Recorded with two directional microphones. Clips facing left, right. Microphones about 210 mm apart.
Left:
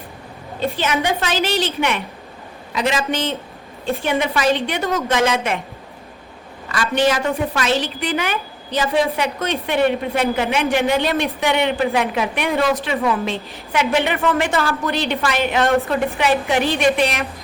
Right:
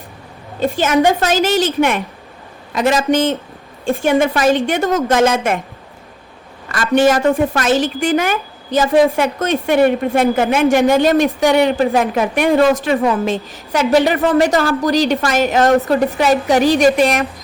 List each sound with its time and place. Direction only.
0.6 s a woman's voice: 45° right (ahead or behind)
6.7 s a woman's voice: 45° right (ahead or behind)